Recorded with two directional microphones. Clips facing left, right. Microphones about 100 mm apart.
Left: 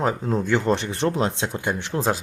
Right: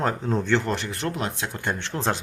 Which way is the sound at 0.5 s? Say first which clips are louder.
Left 3 dB; 20° left (ahead or behind).